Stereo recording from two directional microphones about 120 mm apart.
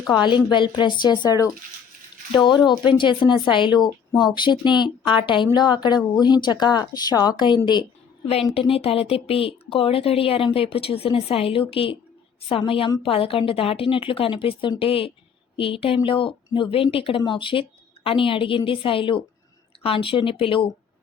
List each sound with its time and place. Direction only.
0.1 s speech: 40° left (ahead or behind)
2.6 s speech: 45° left (ahead or behind)
8.5 s speech: 55° left (ahead or behind)